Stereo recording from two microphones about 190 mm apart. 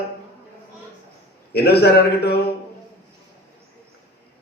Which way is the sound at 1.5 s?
60° left (ahead or behind).